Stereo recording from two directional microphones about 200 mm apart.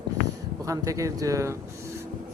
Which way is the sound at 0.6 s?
15° right (ahead or behind).